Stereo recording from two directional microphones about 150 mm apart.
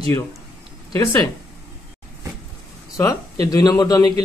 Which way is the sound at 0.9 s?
25° left (ahead or behind).